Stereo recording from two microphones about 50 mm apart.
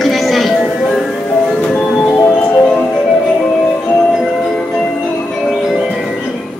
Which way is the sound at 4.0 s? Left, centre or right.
Centre.